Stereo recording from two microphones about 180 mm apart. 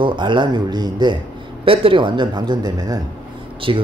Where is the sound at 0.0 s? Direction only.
25° right (ahead or behind).